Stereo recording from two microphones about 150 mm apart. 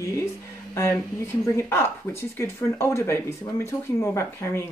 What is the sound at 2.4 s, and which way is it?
Speech, 15° left (ahead or behind).